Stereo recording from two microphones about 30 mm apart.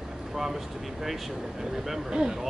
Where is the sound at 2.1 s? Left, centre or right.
Right.